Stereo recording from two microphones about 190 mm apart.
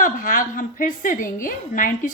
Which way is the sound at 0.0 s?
45° left (ahead or behind).